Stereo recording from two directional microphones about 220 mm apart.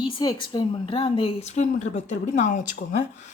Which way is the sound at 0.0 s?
20° left (ahead or behind).